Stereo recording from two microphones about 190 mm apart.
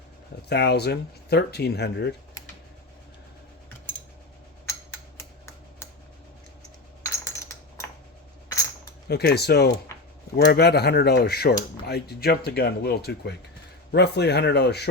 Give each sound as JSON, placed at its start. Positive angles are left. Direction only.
{"t": 0.4, "sound": "speech", "side_deg": 60}
{"t": 4.6, "sound": "a sound", "side_deg": 15}
{"t": 7.0, "sound": "coin", "side_deg": 15}
{"t": 9.0, "sound": "speech", "side_deg": 60}